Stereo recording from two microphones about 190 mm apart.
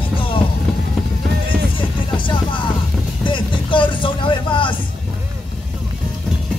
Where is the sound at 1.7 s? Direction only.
25° left (ahead or behind).